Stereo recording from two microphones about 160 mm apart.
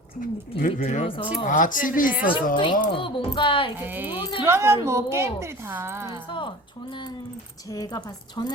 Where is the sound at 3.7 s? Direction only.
10° right (ahead or behind).